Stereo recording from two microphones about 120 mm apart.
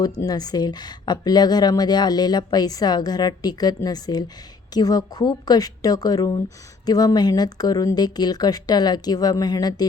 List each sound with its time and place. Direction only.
0.0 s speech: 35° left (ahead or behind)